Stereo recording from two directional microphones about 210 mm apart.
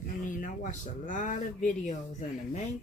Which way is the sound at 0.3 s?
40° left (ahead or behind).